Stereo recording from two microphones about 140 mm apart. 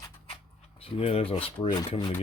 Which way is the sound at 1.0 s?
45° left (ahead or behind).